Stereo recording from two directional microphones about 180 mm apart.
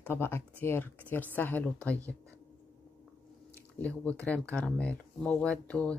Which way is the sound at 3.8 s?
5° left (ahead or behind).